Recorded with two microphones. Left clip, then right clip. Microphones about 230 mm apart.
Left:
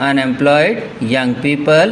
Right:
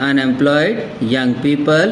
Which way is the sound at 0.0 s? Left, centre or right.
Left.